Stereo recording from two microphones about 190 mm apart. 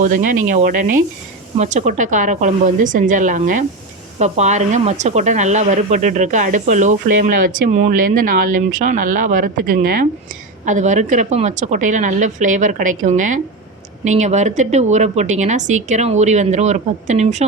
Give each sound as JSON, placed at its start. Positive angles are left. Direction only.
{"t": 0.0, "sound": "a woman's voice", "side_deg": -45}